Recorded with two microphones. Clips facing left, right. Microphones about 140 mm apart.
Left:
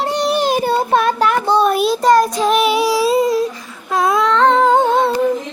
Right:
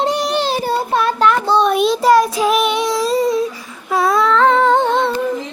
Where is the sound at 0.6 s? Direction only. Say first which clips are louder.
Left 2 dB; 55° left (ahead or behind).